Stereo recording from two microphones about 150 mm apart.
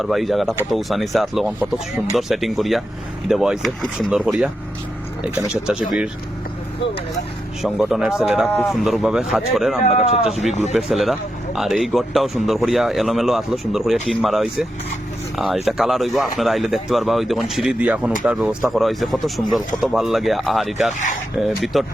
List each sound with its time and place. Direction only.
0.0 s speech: centre (ahead or behind)
5.6 s speech: 5° right (ahead or behind)
7.6 s speech: 5° right (ahead or behind)
9.8 s speech: 45° left (ahead or behind)
10.2 s speech: centre (ahead or behind)